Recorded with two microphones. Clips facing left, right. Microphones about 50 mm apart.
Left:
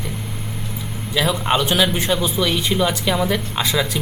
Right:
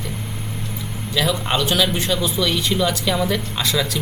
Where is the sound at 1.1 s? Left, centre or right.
Centre.